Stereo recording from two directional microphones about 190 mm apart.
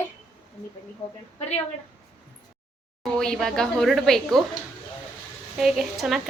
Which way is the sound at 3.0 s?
Centre (ahead or behind).